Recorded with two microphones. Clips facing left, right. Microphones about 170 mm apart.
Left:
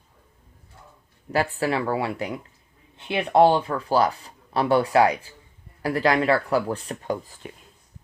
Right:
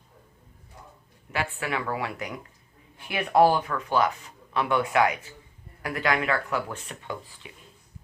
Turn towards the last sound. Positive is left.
turn(degrees=45)  # may be behind; listen again after turning